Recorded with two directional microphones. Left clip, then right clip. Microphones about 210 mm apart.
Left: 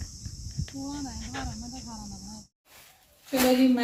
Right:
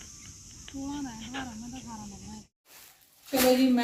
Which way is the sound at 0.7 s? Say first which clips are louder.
Even; 30° left (ahead or behind).